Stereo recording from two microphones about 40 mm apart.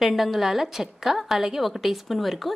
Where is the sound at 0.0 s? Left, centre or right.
Centre.